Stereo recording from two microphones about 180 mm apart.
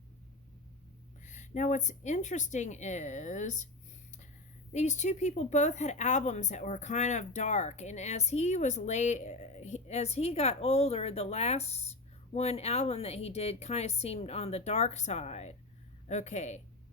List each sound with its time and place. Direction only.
1.2 s speech: 40° left (ahead or behind)
4.7 s speech: 40° left (ahead or behind)